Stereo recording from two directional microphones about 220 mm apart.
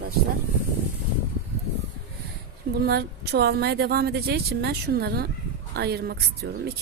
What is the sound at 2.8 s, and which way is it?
A woman's voice, 45° right (ahead or behind).